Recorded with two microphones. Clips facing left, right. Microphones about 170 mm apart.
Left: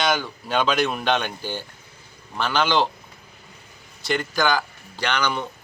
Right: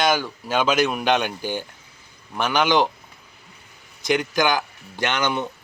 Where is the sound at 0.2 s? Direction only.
5° right (ahead or behind).